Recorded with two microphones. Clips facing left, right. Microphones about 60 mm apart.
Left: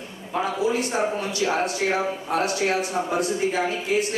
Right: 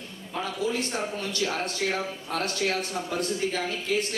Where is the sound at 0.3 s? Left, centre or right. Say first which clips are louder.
Left 6 dB; left.